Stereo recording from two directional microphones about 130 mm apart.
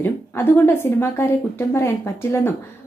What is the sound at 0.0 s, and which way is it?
A woman's voice, 15° left (ahead or behind).